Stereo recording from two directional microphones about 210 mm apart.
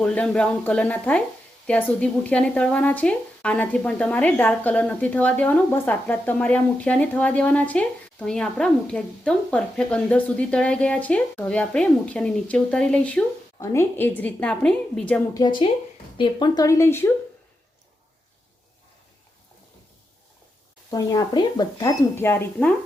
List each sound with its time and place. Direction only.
0.0 s speech: 5° left (ahead or behind)
15.4 s speech: 20° left (ahead or behind)
20.9 s speech: 15° left (ahead or behind)